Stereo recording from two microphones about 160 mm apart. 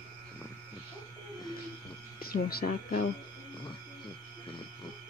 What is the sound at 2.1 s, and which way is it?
Speech, 70° left (ahead or behind).